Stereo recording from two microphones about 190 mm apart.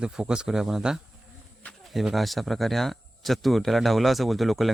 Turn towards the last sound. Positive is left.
turn(degrees=0)  # may be behind; listen again after turning